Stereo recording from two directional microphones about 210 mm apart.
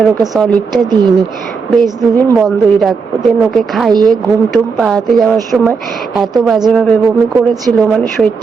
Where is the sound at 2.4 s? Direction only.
Centre (ahead or behind).